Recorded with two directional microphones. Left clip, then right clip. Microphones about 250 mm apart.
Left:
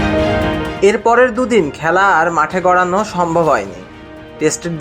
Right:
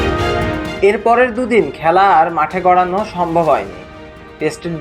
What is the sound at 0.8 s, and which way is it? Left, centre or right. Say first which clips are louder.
Speech: left 1 dB; left.